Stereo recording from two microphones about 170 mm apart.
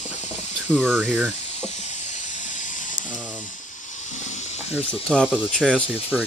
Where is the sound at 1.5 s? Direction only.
40° left (ahead or behind).